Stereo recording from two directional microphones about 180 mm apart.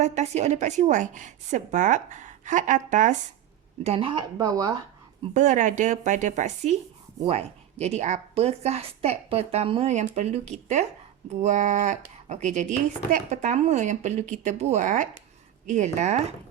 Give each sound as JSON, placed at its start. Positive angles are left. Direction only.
{"t": 0.0, "sound": "a woman's voice", "side_deg": -40}
{"t": 3.8, "sound": "speech", "side_deg": -30}
{"t": 5.3, "sound": "a woman's voice", "side_deg": -45}